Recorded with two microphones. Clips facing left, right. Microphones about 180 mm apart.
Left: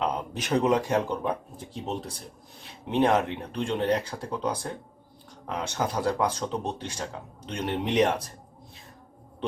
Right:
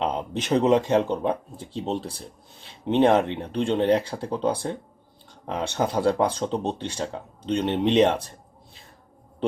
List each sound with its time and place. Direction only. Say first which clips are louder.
0.0 s speech: right 3 dB; 25° right (ahead or behind)